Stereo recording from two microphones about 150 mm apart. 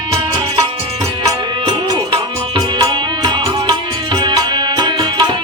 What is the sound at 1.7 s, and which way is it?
Music, 30° right (ahead or behind).